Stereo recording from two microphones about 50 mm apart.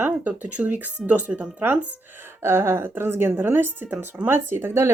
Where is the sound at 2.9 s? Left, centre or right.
Right.